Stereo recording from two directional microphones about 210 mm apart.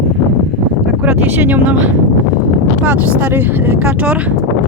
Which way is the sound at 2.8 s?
10° right (ahead or behind).